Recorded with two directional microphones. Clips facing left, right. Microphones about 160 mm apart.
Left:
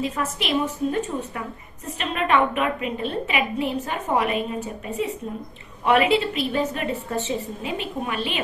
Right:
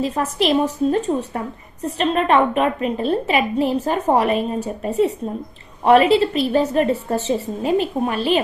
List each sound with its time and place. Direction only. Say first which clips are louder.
0.0 s a woman's voice: right 7 dB; 35° right (ahead or behind)